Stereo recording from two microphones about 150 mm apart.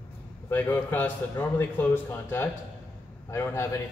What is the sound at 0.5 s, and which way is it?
Speech, 15° left (ahead or behind).